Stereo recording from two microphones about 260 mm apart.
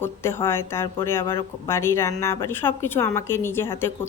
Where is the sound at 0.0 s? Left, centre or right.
Centre.